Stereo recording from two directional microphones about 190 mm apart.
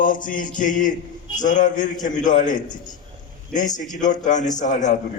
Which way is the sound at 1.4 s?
40° left (ahead or behind).